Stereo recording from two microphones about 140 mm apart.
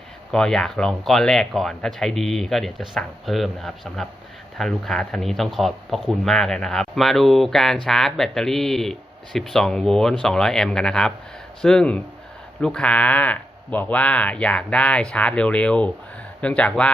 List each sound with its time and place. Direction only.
0.3 s speech: 5° left (ahead or behind)